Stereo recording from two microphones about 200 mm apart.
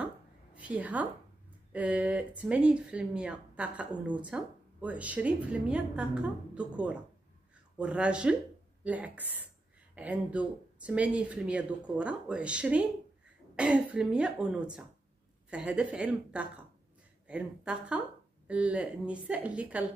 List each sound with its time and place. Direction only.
0.6 s a woman's voice: 5° right (ahead or behind)